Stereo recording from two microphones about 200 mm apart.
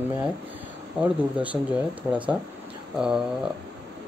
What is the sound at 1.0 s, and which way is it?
Speech, 5° right (ahead or behind).